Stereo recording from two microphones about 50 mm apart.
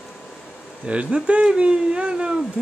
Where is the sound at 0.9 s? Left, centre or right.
Right.